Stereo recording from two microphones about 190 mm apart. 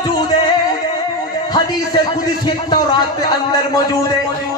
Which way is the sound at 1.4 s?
20° left (ahead or behind).